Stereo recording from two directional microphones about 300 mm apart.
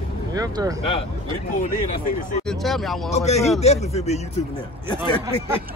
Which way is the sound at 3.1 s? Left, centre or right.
Left.